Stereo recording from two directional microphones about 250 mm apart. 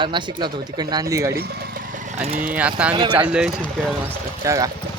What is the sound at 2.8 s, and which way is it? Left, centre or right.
Speech, centre.